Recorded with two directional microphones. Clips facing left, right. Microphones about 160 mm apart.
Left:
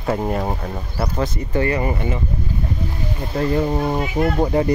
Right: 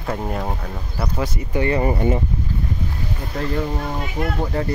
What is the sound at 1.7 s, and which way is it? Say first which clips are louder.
Speech: right 2 dB; 30° right (ahead or behind).